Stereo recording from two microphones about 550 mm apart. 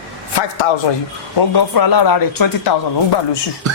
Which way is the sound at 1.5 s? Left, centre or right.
Left.